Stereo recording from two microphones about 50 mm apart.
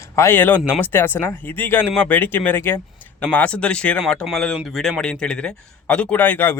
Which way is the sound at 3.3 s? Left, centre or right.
Left.